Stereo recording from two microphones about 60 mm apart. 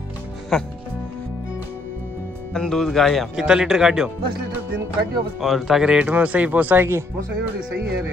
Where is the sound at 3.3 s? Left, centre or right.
Centre.